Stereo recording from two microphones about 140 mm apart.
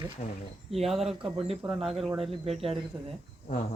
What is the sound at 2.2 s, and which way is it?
Speech, 45° right (ahead or behind).